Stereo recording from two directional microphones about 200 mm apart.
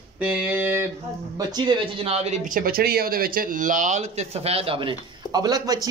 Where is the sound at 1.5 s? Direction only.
25° right (ahead or behind).